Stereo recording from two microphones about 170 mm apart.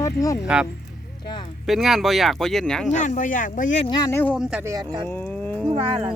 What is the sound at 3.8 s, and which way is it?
Speech, 25° left (ahead or behind).